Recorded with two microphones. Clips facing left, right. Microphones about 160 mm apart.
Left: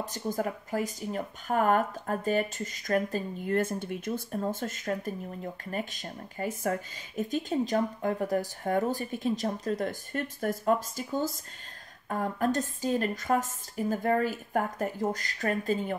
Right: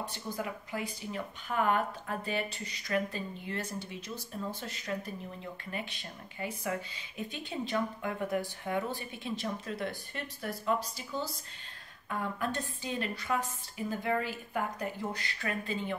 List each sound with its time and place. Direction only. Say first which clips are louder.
0.0 s speech: left 6 dB; 45° left (ahead or behind)